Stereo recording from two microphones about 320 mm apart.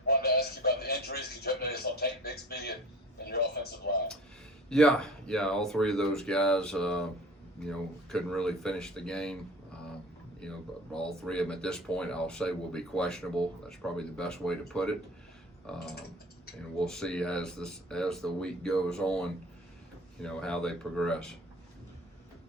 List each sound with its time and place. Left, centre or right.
0.1 s music: left
1.6 s a man's voice: left
4.7 s speech: centre
10.9 s speech: centre